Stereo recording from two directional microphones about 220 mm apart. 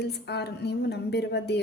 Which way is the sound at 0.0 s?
50° left (ahead or behind).